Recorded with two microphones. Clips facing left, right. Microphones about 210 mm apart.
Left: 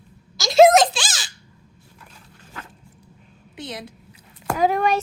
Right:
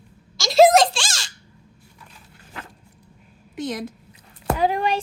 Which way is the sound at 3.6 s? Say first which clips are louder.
Right 6 dB; 45° right (ahead or behind).